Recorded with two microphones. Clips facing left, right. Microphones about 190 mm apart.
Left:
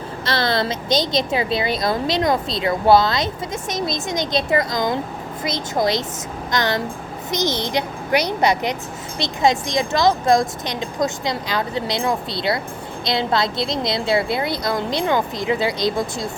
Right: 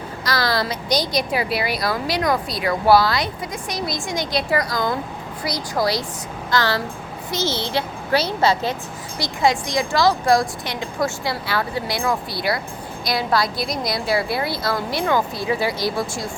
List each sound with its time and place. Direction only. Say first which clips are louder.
0.3 s a woman's voice: left 1 dB; 25° left (ahead or behind)